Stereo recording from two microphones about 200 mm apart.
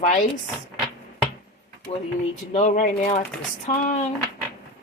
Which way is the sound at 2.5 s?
40° left (ahead or behind).